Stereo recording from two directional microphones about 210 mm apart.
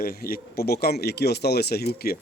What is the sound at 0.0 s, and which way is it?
Speech, 45° left (ahead or behind).